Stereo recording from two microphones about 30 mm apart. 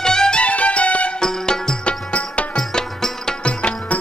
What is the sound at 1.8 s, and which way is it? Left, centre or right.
Music, left.